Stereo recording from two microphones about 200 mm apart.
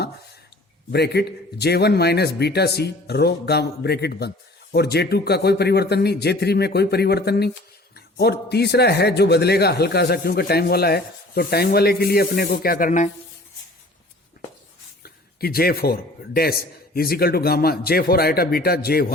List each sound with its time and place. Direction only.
0.9 s a man's voice: 55° left (ahead or behind)
15.0 s a man's voice: 50° left (ahead or behind)